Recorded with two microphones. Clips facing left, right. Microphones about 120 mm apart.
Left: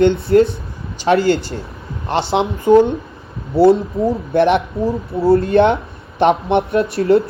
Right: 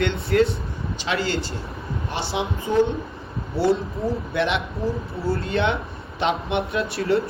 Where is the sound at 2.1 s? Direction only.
70° left (ahead or behind).